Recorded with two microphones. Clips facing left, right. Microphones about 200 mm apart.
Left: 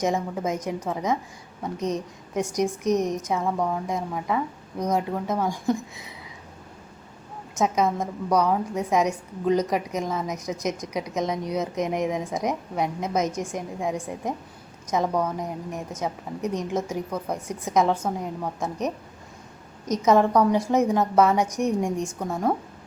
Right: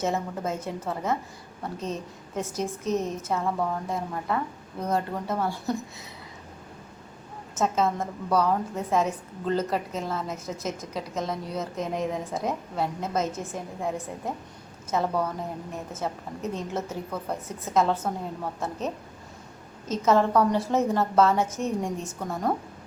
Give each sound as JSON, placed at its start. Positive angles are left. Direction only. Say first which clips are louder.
{"t": 0.0, "sound": "a woman's voice", "louder": "left 3 dB", "side_deg": 15}
{"t": 7.6, "sound": "a woman's voice", "louder": "left 2 dB", "side_deg": 15}
{"t": 19.8, "sound": "a woman's voice", "louder": "left 3 dB", "side_deg": 15}